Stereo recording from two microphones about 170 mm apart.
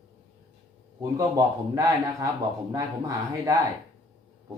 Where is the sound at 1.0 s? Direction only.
20° right (ahead or behind).